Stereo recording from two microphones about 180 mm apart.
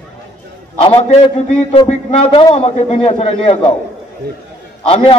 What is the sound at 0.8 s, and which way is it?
A man's voice, 30° left (ahead or behind).